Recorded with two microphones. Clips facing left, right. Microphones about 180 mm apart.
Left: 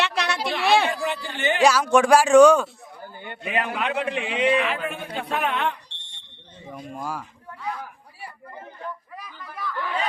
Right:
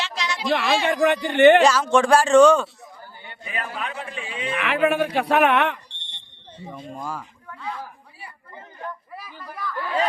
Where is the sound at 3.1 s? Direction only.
55° left (ahead or behind); by 4.5 s 75° left (ahead or behind).